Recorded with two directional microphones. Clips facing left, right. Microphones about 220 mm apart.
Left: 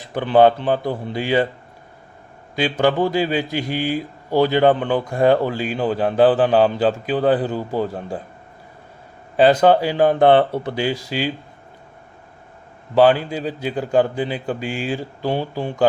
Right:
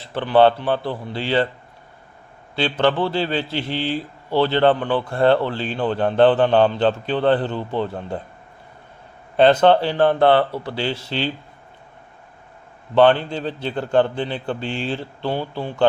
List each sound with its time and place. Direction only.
0.0 s a man's voice: 15° left (ahead or behind)
2.6 s a man's voice: 10° left (ahead or behind)
9.4 s a man's voice: 10° left (ahead or behind)
12.9 s a man's voice: 5° left (ahead or behind)